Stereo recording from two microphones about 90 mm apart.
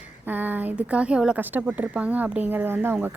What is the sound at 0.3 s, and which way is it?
Speech, 20° right (ahead or behind).